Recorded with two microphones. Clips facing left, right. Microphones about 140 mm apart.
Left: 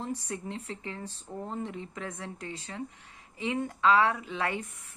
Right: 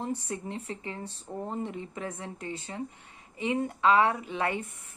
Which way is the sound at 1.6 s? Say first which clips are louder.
Right 2 dB; 35° right (ahead or behind).